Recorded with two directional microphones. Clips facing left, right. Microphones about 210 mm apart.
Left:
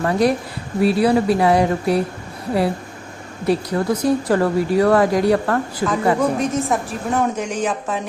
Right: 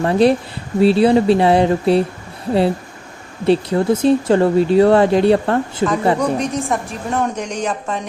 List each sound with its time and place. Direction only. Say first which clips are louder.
0.0 s speech: right 4 dB; 25° right (ahead or behind)
3.4 s speech: right 4 dB; 25° right (ahead or behind)
6.1 s a woman's voice: even; centre (ahead or behind)